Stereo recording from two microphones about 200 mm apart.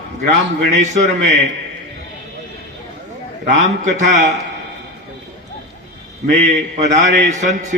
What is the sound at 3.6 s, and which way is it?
Music, 35° right (ahead or behind).